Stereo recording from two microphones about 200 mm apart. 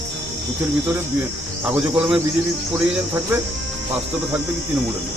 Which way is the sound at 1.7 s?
5° right (ahead or behind).